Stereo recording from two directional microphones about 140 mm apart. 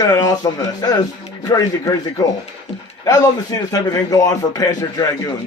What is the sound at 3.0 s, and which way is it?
A man's voice, 25° left (ahead or behind).